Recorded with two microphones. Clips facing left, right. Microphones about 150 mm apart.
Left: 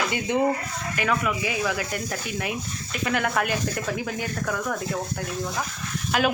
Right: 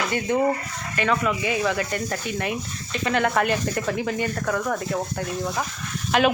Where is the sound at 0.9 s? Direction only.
5° left (ahead or behind).